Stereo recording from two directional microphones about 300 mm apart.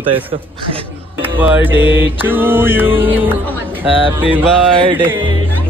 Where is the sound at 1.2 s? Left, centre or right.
Centre.